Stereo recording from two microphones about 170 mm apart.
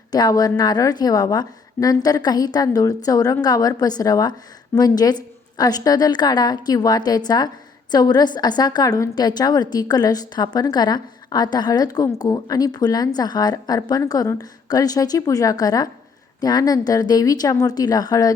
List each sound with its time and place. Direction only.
0.1 s a woman's voice: 25° left (ahead or behind)